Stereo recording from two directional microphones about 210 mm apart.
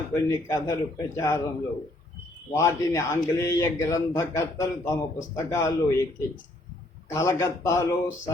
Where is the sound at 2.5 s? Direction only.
15° left (ahead or behind).